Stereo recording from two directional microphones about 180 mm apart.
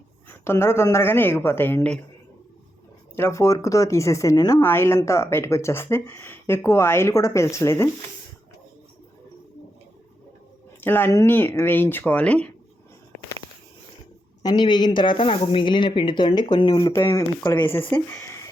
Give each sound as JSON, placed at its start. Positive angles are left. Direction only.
{"t": 0.3, "sound": "speech", "side_deg": 15}
{"t": 3.2, "sound": "speech", "side_deg": 15}
{"t": 10.8, "sound": "speech", "side_deg": 10}
{"t": 14.4, "sound": "speech", "side_deg": 25}